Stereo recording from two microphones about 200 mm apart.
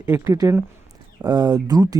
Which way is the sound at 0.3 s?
15° right (ahead or behind).